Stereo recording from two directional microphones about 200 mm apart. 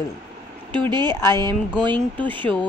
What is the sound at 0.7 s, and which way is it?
Speech, 20° right (ahead or behind).